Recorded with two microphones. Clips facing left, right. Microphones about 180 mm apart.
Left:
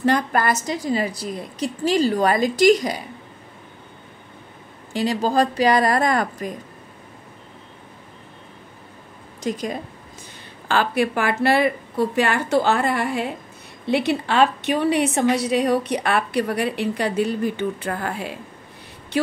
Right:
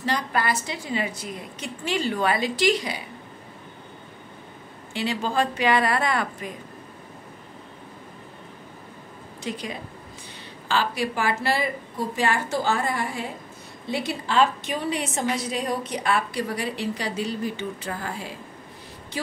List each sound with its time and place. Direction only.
0.0 s a woman's voice: 50° left (ahead or behind)
4.9 s a woman's voice: 40° left (ahead or behind)
9.4 s a woman's voice: 45° left (ahead or behind)
10.7 s a woman's voice: 55° left (ahead or behind)